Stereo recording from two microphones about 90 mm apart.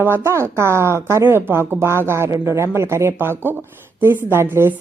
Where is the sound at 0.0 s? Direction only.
25° right (ahead or behind).